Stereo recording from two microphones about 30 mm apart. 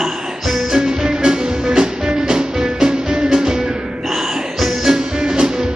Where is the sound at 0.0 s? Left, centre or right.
Centre.